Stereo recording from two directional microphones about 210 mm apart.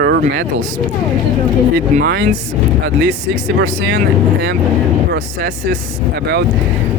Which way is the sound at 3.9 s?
55° right (ahead or behind).